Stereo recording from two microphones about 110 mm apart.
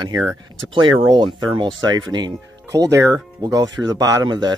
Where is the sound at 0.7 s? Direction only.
45° right (ahead or behind).